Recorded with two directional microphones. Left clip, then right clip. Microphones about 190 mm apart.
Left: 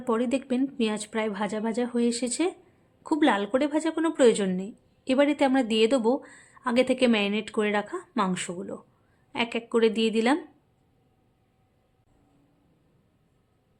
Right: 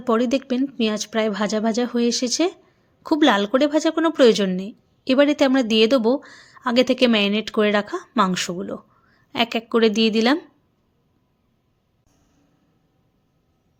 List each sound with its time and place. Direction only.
0.0 s a woman's voice: 25° right (ahead or behind)